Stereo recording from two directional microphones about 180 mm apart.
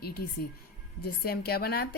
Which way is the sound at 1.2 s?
60° left (ahead or behind).